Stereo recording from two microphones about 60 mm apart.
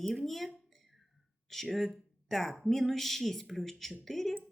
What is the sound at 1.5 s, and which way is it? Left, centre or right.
Speech, centre.